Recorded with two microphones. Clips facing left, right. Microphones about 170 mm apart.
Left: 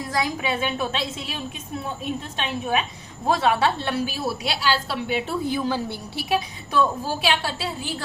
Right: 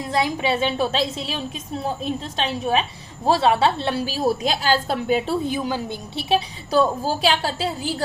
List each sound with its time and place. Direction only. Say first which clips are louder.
0.1 s a woman's voice: right 4 dB; 30° right (ahead or behind)
5.5 s a woman's voice: even; 15° right (ahead or behind)
6.1 s a woman's voice: right 3 dB; 25° right (ahead or behind)